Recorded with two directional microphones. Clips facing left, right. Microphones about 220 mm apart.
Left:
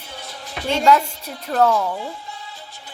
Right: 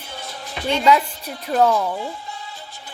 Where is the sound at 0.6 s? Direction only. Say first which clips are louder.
Left 1 dB; centre (ahead or behind).